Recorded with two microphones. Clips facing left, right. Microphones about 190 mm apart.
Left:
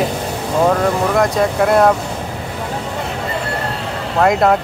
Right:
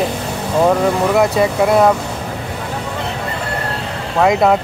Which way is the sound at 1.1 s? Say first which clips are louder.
Right 1 dB; 5° right (ahead or behind).